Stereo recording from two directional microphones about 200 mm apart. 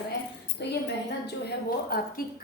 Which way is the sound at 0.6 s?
60° left (ahead or behind).